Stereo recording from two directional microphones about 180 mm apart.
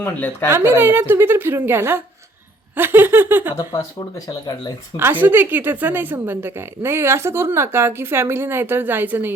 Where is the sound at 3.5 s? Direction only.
20° left (ahead or behind).